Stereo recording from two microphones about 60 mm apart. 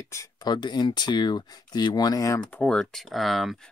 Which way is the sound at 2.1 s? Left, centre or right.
Left.